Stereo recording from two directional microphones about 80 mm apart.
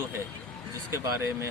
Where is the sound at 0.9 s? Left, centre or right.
Right.